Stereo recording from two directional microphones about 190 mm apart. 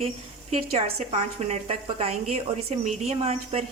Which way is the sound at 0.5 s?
35° right (ahead or behind).